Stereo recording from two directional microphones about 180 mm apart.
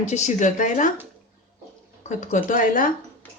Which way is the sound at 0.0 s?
40° left (ahead or behind).